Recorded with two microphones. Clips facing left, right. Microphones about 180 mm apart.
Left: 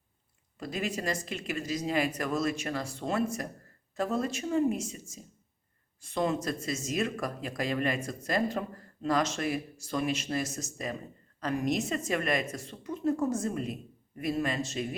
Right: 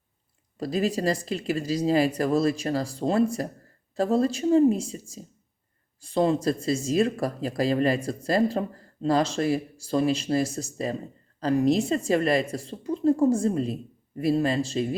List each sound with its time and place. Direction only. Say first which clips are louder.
0.6 s speech: right 8 dB; 35° right (ahead or behind)